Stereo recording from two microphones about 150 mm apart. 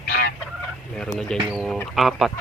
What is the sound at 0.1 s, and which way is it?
Fowl, 90° left.